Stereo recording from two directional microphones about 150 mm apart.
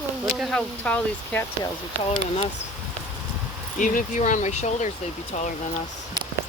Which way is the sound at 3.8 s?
60° left (ahead or behind).